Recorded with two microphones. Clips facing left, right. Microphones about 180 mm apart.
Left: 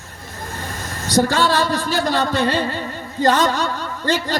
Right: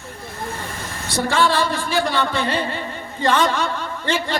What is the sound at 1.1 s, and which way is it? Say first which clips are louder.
A man's voice: left 2 dB; 40° left (ahead or behind).